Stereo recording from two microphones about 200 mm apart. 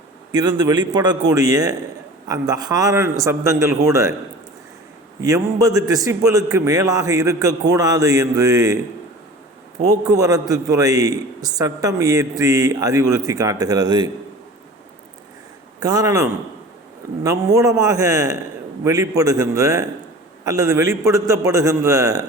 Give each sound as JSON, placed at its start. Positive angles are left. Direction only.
{"t": 0.3, "sound": "a man's voice", "side_deg": -20}
{"t": 5.2, "sound": "a man's voice", "side_deg": -15}
{"t": 9.9, "sound": "a man's voice", "side_deg": -20}
{"t": 15.8, "sound": "a man's voice", "side_deg": -20}